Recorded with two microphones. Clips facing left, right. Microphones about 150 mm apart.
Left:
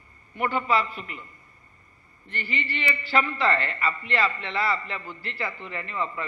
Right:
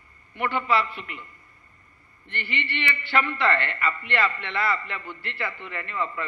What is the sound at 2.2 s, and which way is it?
A man's voice, 35° left (ahead or behind).